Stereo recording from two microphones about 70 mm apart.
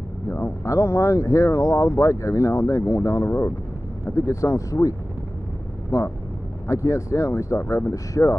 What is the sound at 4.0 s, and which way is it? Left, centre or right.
Speech, left.